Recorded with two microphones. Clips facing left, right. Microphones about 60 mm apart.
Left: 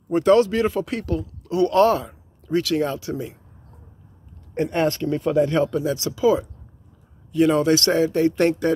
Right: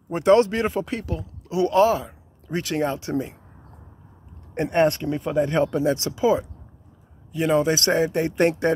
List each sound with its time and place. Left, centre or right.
0.1 s a man's voice: right
0.8 s speech: centre
1.2 s speech: right
2.4 s a man's voice: right
4.6 s a man's voice: right
5.7 s speech: right
7.3 s a man's voice: centre